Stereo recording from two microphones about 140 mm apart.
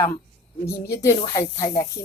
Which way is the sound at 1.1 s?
40° left (ahead or behind).